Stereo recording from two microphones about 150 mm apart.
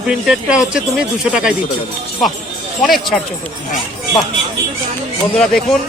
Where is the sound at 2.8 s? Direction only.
Centre (ahead or behind).